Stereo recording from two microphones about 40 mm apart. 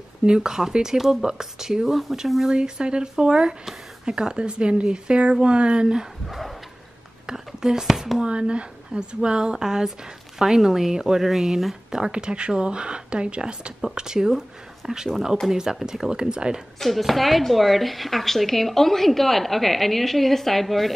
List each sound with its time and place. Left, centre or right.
0.2 s speech: centre
2.4 s speech: centre
6.2 s a sound: centre
7.2 s speech: centre
8.2 s speech: right
13.7 s speech: centre
16.8 s speech: centre